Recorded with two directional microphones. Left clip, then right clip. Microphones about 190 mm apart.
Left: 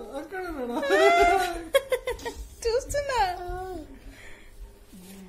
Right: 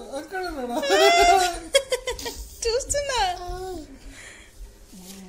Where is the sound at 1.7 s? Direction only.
10° left (ahead or behind).